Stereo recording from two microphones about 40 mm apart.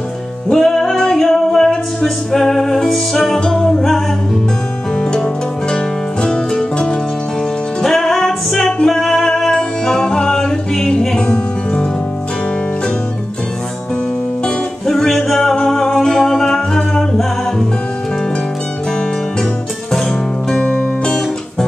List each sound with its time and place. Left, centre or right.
0.5 s music: centre
3.3 s music: centre
7.8 s music: centre
14.9 s music: centre
19.9 s music: centre